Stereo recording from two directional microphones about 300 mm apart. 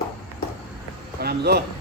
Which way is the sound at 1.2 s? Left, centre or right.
Right.